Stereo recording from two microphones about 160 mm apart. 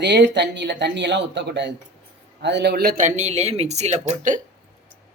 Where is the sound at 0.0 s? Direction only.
90° right; by 3.1 s 70° right (ahead or behind).